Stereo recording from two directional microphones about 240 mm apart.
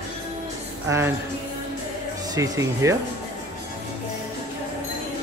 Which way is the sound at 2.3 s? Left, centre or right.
Centre.